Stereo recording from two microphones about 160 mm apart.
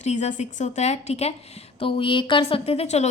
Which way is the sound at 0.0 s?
45° left (ahead or behind).